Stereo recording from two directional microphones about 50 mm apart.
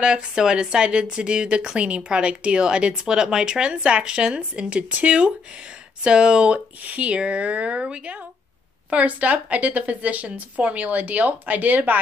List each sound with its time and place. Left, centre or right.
0.0 s speech: centre
6.8 s speech: right